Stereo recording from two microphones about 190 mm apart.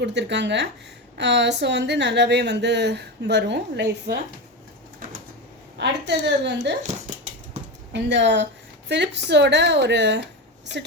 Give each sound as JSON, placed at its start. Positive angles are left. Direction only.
{"t": 0.0, "sound": "a woman's voice", "side_deg": -65}
{"t": 5.7, "sound": "a woman's voice", "side_deg": -65}
{"t": 7.9, "sound": "a woman's voice", "side_deg": -70}